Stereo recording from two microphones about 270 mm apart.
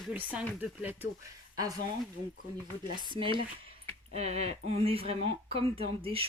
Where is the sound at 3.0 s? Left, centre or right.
Centre.